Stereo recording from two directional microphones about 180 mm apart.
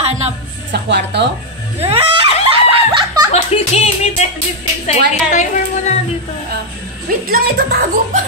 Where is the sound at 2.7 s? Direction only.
25° right (ahead or behind).